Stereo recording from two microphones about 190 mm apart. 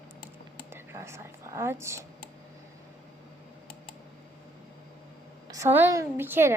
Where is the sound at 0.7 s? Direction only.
15° right (ahead or behind).